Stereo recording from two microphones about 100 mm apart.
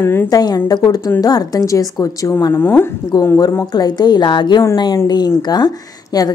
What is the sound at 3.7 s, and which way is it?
A woman's voice, 45° left (ahead or behind).